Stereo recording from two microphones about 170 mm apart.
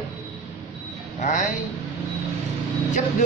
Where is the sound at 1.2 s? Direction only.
45° left (ahead or behind).